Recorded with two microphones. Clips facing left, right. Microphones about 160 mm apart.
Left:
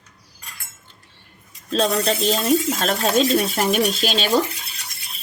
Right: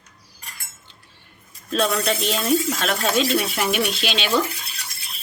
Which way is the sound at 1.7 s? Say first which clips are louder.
Left 2 dB; 35° left (ahead or behind).